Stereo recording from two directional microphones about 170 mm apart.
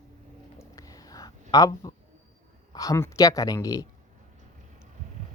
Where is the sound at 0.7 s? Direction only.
20° left (ahead or behind).